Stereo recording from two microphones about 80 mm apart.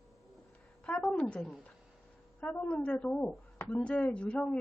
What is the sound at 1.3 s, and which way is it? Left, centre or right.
Speech, centre.